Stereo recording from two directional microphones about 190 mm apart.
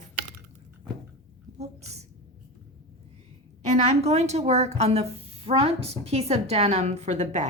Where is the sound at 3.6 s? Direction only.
40° right (ahead or behind).